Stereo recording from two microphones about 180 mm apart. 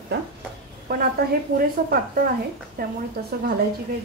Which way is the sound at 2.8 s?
50° right (ahead or behind).